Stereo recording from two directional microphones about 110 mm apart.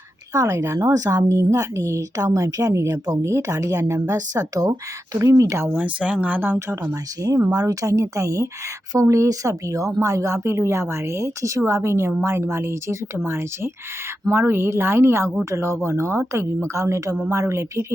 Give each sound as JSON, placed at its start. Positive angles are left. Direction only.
{"t": 0.3, "sound": "speech", "side_deg": -25}
{"t": 5.7, "sound": "speech", "side_deg": -10}
{"t": 6.8, "sound": "speech", "side_deg": -30}